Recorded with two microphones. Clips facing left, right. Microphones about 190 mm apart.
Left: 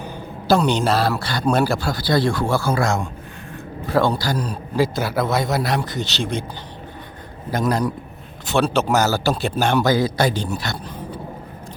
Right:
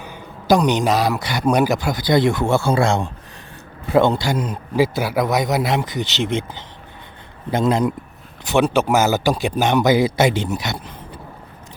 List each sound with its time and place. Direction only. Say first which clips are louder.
0.4 s a man's voice: right 1 dB; 15° right (ahead or behind)
7.5 s a man's voice: right 3 dB; 25° right (ahead or behind)